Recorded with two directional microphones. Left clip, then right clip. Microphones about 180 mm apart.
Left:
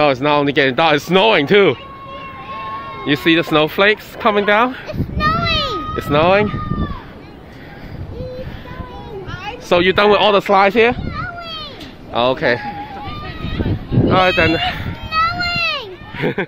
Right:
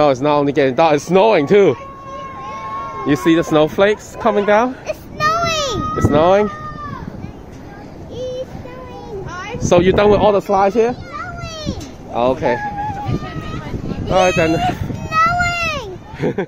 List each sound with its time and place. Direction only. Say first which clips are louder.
0.0 s speech: even; 10° right (ahead or behind)
3.1 s speech: even; 15° right (ahead or behind)
4.8 s a sound: right 1 dB; 65° right (ahead or behind)
5.9 s speech: right 1 dB; 15° right (ahead or behind)
9.7 s speech: even; 10° right (ahead or behind)
10.2 s speech: left 1 dB; 10° left (ahead or behind)
12.1 s speech: left 1 dB; 5° left (ahead or behind)
14.1 s speech: even; 10° right (ahead or behind)
15.0 s a sound: right 3 dB; 60° right (ahead or behind)
16.2 s speech: left 1 dB; 10° right (ahead or behind)